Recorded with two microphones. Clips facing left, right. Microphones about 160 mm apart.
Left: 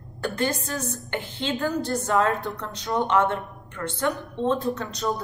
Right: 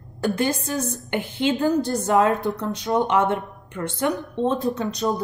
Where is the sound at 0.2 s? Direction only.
15° right (ahead or behind).